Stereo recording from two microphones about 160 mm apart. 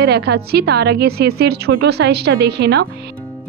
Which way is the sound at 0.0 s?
90° right.